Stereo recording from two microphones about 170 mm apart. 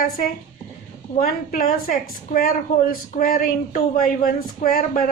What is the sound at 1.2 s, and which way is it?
Speech, 55° left (ahead or behind).